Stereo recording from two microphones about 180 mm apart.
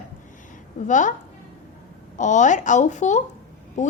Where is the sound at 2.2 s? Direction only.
45° left (ahead or behind).